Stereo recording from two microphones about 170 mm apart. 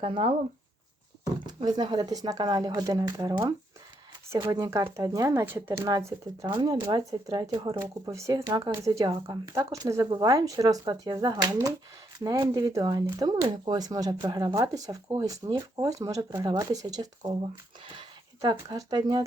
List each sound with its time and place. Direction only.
0.0 s speech: 30° right (ahead or behind)
1.4 s speech: 25° right (ahead or behind)
18.4 s speech: 25° right (ahead or behind)